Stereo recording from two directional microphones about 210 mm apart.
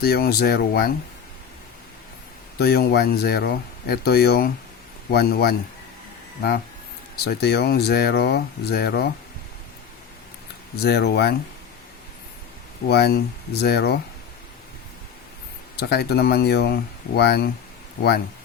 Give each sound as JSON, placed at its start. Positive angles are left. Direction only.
{"t": 0.0, "sound": "speech", "side_deg": 50}
{"t": 2.6, "sound": "speech", "side_deg": 50}
{"t": 7.3, "sound": "speech", "side_deg": 50}
{"t": 10.8, "sound": "speech", "side_deg": 50}
{"t": 12.9, "sound": "speech", "side_deg": 50}
{"t": 15.7, "sound": "speech", "side_deg": 50}